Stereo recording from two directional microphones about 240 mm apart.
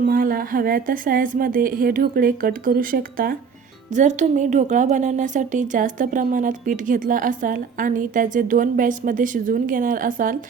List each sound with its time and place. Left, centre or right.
0.0 s a woman's voice: right